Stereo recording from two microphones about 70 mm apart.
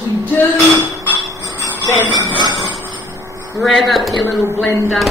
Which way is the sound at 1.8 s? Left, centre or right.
Left.